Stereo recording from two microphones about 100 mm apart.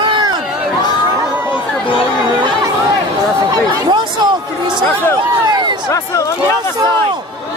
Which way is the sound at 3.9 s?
50° right (ahead or behind).